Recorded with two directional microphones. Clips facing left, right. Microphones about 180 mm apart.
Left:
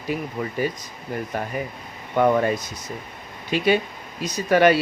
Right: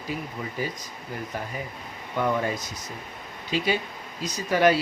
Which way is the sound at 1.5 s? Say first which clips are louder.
Left 5 dB; 65° left (ahead or behind).